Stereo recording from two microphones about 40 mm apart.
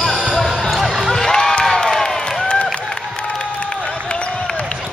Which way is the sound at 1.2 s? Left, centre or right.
Centre.